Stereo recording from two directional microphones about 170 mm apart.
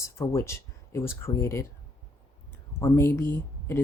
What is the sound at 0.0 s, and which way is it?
Speech, 15° left (ahead or behind).